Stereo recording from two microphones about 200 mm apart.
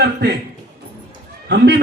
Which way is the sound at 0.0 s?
55° right (ahead or behind).